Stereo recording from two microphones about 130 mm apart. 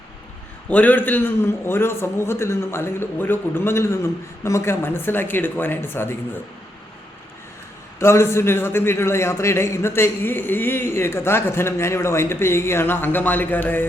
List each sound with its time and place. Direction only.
0.7 s a man's voice: 10° left (ahead or behind)
7.9 s a man's voice: 20° left (ahead or behind)